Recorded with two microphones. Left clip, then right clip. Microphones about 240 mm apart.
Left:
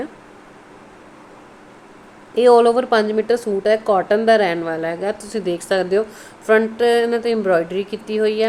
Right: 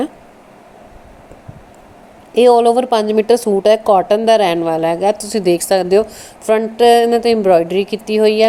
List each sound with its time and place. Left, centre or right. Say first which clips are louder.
2.3 s speech: right 3 dB; centre